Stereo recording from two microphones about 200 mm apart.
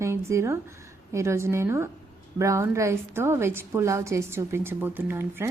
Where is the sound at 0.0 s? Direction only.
15° right (ahead or behind).